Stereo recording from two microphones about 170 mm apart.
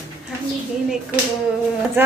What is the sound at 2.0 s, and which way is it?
Speech, 15° right (ahead or behind).